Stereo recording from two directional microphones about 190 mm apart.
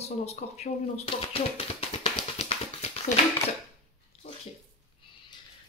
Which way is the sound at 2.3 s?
35° left (ahead or behind).